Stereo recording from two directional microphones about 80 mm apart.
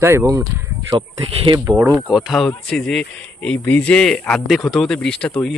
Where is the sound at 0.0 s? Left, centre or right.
Right.